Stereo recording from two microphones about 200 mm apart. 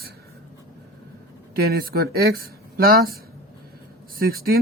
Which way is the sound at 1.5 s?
50° right (ahead or behind).